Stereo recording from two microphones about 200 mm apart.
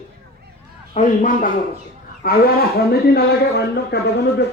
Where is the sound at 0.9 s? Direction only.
40° left (ahead or behind).